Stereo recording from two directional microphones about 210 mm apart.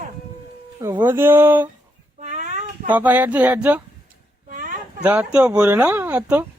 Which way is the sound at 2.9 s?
10° right (ahead or behind).